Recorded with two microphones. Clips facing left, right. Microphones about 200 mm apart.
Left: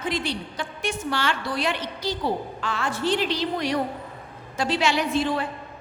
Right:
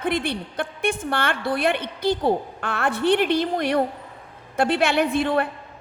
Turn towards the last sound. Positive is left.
turn(degrees=-60)  # may be behind; listen again after turning